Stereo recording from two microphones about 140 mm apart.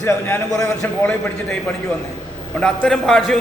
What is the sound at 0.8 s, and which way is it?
Speech, 10° left (ahead or behind).